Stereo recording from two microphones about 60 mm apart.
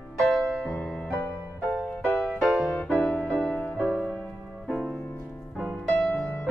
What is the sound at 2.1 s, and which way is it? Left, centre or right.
Music, left.